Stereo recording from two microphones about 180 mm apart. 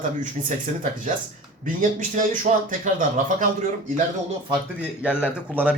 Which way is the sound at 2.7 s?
45° right (ahead or behind).